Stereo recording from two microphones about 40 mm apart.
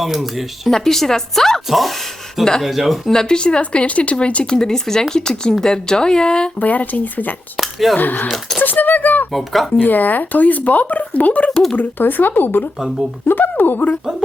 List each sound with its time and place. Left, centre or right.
0.0 s speech: centre
0.7 s speech: centre
2.6 s speech: centre
3.1 s speech: centre
4.4 s speech: centre
6.6 s speech: left
7.5 s speech: centre
7.9 s speech: left
8.3 s speech: centre
8.6 s speech: left
9.3 s speech: centre
9.8 s speech: left
11.8 s speech: left